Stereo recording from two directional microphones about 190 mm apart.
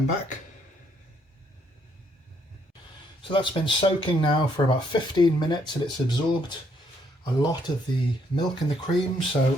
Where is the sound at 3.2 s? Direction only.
25° left (ahead or behind).